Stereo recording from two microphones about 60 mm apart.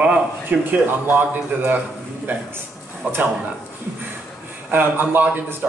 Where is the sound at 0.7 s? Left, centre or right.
Right.